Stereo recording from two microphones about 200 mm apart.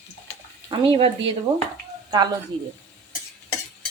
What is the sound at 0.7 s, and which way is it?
A woman's voice, 25° right (ahead or behind).